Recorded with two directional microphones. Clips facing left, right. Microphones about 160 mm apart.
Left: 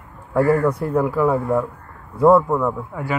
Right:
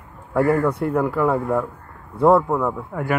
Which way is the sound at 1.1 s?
60° right (ahead or behind).